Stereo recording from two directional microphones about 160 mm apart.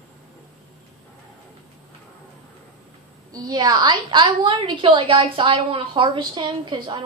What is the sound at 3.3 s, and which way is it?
A woman's voice, 25° right (ahead or behind).